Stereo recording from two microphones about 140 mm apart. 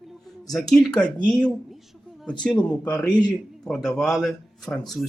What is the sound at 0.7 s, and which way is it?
Speech, 5° left (ahead or behind).